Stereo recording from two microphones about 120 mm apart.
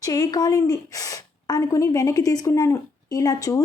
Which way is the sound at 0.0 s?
30° left (ahead or behind).